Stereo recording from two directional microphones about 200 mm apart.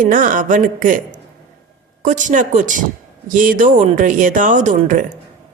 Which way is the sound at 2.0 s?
40° right (ahead or behind).